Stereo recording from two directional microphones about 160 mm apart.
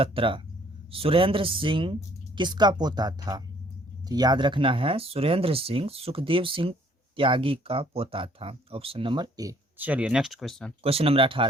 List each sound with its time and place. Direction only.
0.0 s speech: 35° right (ahead or behind)
9.7 s speech: 10° right (ahead or behind)
10.8 s speech: 35° right (ahead or behind)